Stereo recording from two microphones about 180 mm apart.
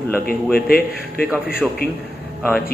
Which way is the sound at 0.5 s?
55° left (ahead or behind).